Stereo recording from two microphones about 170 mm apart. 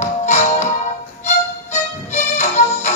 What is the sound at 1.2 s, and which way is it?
Music, 45° left (ahead or behind).